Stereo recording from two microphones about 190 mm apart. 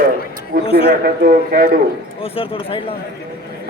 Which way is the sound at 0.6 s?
30° left (ahead or behind).